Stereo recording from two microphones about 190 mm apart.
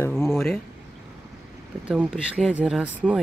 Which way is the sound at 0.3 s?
Centre (ahead or behind).